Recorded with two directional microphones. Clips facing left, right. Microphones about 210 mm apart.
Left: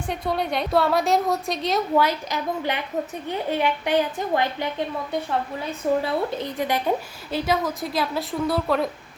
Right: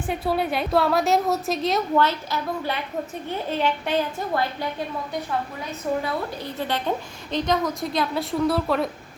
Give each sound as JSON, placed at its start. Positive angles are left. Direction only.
{"t": 0.1, "sound": "a woman's voice", "side_deg": -5}
{"t": 2.0, "sound": "a woman's voice", "side_deg": 15}
{"t": 6.0, "sound": "a woman's voice", "side_deg": 25}